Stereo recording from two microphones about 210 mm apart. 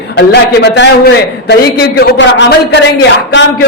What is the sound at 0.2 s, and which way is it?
A man's voice, 55° left (ahead or behind).